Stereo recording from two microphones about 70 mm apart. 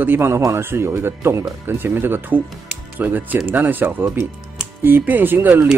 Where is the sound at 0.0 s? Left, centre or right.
Right.